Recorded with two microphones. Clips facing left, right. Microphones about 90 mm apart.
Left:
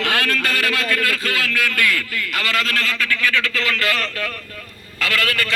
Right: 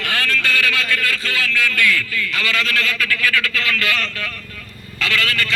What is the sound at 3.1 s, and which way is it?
Speech, 25° left (ahead or behind).